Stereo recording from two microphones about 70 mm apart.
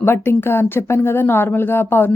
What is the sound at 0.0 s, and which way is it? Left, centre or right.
Speech, left.